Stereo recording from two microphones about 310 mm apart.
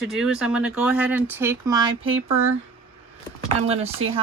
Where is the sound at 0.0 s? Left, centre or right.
Centre.